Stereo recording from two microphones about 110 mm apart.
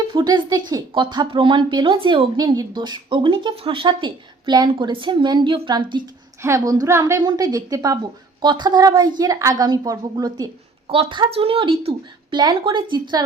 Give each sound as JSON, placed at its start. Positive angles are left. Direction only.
{"t": 0.1, "sound": "speech", "side_deg": -45}
{"t": 2.3, "sound": "speech", "side_deg": -40}
{"t": 6.4, "sound": "a woman's voice", "side_deg": -30}
{"t": 10.8, "sound": "a woman's voice", "side_deg": -60}
{"t": 12.4, "sound": "a woman's voice", "side_deg": -45}